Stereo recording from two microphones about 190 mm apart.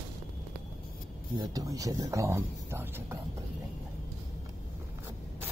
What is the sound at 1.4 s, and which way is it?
Speech, 20° right (ahead or behind).